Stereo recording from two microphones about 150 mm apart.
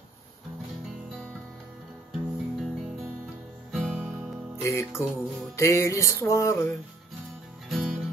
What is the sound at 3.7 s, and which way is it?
Music, 5° right (ahead or behind).